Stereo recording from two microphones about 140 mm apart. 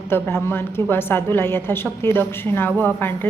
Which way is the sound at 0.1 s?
15° left (ahead or behind).